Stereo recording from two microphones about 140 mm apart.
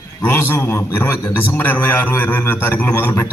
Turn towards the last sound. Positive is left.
turn(degrees=15)  # may be behind; listen again after turning